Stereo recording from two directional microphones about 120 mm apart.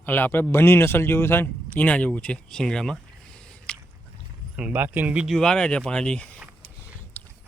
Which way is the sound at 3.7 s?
10° left (ahead or behind).